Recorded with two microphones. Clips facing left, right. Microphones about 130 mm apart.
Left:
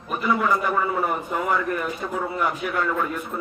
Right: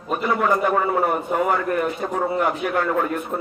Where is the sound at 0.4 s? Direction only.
50° right (ahead or behind).